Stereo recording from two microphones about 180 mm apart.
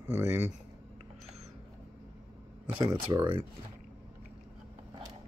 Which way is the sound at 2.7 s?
30° right (ahead or behind).